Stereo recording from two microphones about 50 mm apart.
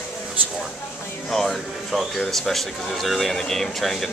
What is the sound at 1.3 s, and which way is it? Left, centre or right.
Speech, centre.